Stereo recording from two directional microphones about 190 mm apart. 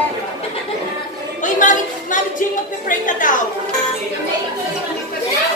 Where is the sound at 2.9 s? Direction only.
45° left (ahead or behind).